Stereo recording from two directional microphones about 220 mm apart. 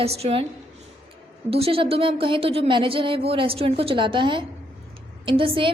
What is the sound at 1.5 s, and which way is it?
A woman's voice, 25° right (ahead or behind).